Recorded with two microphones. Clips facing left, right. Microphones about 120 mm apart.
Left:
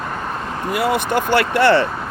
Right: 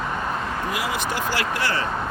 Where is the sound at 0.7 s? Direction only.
55° left (ahead or behind).